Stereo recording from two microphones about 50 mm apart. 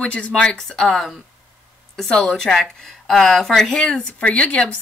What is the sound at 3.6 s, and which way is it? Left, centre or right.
Speech, centre.